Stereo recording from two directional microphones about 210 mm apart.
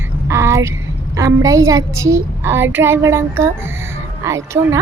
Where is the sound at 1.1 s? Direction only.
15° right (ahead or behind).